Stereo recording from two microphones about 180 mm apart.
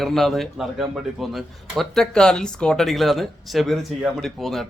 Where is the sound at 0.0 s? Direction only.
Centre (ahead or behind).